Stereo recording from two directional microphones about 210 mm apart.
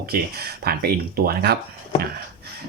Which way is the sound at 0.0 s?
50° right (ahead or behind).